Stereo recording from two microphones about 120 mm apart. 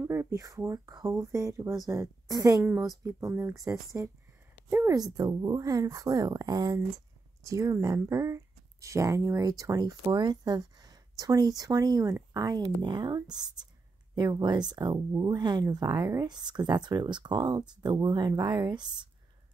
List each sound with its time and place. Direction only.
0.0 s speech: 20° right (ahead or behind); by 19.0 s 40° right (ahead or behind)